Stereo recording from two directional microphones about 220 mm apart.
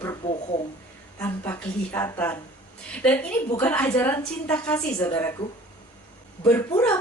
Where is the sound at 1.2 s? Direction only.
10° left (ahead or behind).